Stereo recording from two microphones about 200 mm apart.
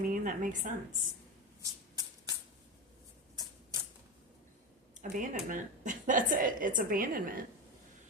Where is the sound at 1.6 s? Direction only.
20° right (ahead or behind).